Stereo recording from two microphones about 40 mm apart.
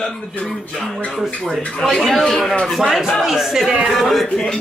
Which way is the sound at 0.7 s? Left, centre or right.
Left.